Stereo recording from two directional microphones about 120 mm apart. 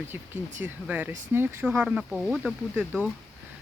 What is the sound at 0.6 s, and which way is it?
Speech, 15° right (ahead or behind).